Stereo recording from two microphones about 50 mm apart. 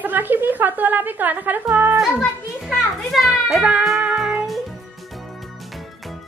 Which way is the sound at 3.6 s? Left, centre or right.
Right.